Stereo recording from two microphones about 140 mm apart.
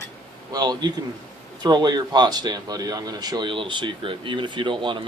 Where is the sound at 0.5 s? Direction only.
30° right (ahead or behind).